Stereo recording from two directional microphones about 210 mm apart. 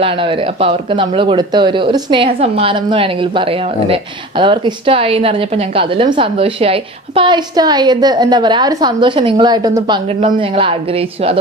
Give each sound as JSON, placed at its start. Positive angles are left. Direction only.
{"t": 0.0, "sound": "speech", "side_deg": -25}